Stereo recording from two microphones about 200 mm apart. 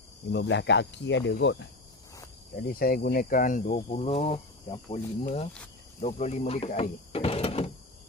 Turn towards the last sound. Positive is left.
turn(degrees=30)  # may be behind; listen again after turning